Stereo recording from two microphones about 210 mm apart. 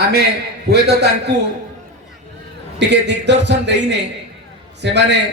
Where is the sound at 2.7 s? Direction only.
55° right (ahead or behind).